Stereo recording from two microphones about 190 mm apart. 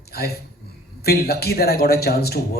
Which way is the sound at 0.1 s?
55° left (ahead or behind).